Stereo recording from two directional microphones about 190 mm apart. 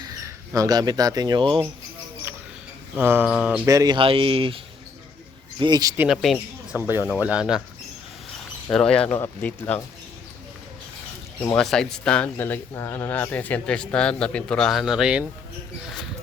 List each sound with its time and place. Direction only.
0.2 s speech: 15° right (ahead or behind)
3.0 s mantra: 10° right (ahead or behind)
3.7 s speech: 20° right (ahead or behind)
6.0 s speech: centre (ahead or behind)
6.7 s mantra: 10° right (ahead or behind)
7.2 s speech: 5° right (ahead or behind)
8.7 s speech: 5° left (ahead or behind)
11.3 s speech: 5° left (ahead or behind)